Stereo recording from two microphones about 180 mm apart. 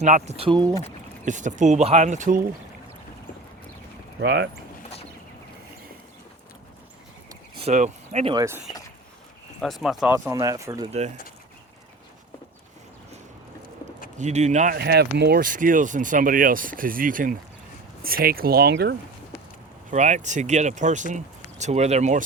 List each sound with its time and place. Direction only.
0.0 s speech: 40° right (ahead or behind)
1.2 s speech: 45° right (ahead or behind)
4.2 s speech: 70° right (ahead or behind)
7.6 s speech: 40° right (ahead or behind)
8.3 s speech: 20° right (ahead or behind)
9.6 s speech: centre (ahead or behind)
10.1 s speech: 15° right (ahead or behind)
14.2 s speech: 40° right (ahead or behind)
14.8 s speech: 65° right (ahead or behind)
19.9 s speech: 40° right (ahead or behind)